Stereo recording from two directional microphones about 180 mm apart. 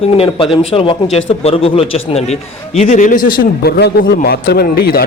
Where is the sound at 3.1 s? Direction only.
50° left (ahead or behind).